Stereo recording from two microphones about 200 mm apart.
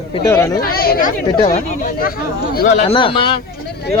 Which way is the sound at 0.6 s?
50° left (ahead or behind).